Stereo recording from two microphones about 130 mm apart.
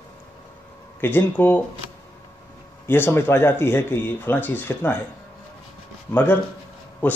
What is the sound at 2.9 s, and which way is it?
Speech, 20° left (ahead or behind).